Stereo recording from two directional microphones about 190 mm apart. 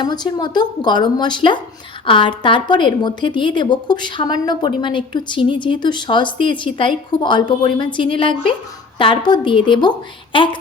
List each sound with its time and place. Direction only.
0.0 s a woman's voice: 20° left (ahead or behind)